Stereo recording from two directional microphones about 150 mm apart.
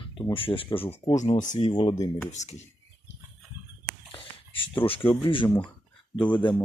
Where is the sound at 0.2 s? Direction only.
35° left (ahead or behind).